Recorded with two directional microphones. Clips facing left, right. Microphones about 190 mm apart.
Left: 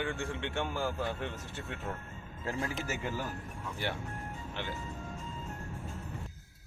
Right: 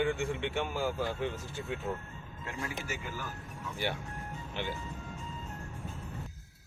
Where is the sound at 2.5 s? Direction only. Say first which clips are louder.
Left 6 dB; 35° left (ahead or behind).